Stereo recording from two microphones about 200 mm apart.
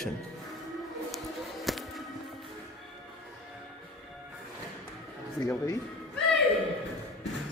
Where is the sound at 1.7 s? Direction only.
Centre (ahead or behind).